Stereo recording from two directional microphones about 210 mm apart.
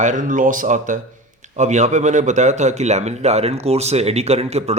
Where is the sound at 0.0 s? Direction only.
35° right (ahead or behind).